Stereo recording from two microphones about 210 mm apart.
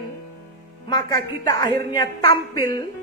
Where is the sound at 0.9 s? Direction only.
20° left (ahead or behind).